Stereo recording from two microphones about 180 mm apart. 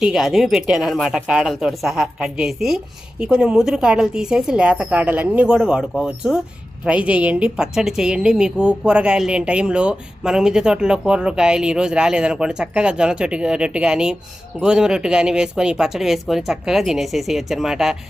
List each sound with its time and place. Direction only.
0.0 s a woman's voice: centre (ahead or behind)